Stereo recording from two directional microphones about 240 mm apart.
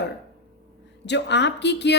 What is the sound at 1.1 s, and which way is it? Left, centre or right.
Speech, left.